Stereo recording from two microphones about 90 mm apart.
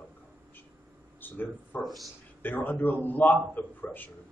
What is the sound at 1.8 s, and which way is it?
Speech, centre (ahead or behind).